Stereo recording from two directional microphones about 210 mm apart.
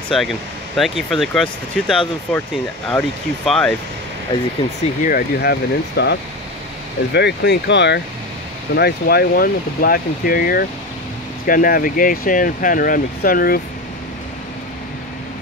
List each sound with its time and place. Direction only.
0.1 s speech: centre (ahead or behind)
4.6 s speech: 30° left (ahead or behind)
5.0 s speech: 45° left (ahead or behind)